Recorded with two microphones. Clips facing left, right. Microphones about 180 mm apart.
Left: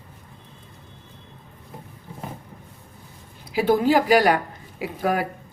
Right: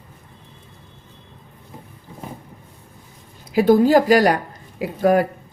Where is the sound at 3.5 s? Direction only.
45° right (ahead or behind).